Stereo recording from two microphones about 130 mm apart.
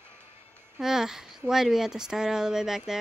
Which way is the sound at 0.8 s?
5° right (ahead or behind).